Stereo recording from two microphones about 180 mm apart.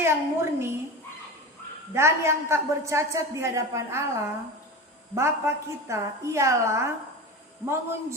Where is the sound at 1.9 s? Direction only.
15° right (ahead or behind).